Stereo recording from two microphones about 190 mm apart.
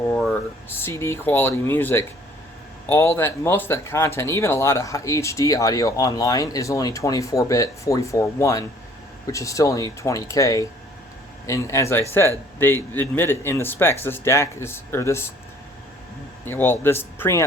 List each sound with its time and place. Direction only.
0.2 s speech: 10° left (ahead or behind)
16.5 s speech: 10° left (ahead or behind)